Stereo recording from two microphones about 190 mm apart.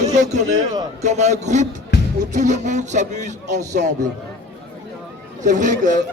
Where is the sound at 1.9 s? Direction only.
60° left (ahead or behind).